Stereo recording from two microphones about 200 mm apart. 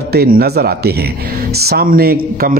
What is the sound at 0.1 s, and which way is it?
A man's voice, 50° right (ahead or behind).